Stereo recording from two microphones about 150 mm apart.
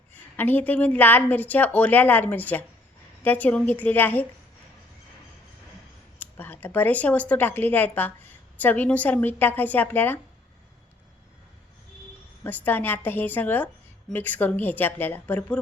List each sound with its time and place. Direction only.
0.1 s a woman's voice: 10° left (ahead or behind)
6.1 s a woman's voice: 15° left (ahead or behind)
12.4 s a woman's voice: 15° left (ahead or behind)